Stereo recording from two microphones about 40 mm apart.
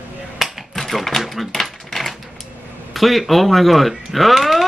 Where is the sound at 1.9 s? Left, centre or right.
Centre.